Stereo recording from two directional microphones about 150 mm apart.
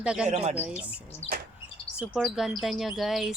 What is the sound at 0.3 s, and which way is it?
Speech, 45° right (ahead or behind).